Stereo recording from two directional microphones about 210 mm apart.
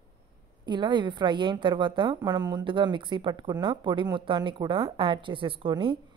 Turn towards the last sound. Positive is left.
turn(degrees=-25)  # may be behind; listen again after turning